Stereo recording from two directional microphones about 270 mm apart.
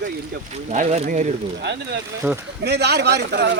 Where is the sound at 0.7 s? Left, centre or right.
Right.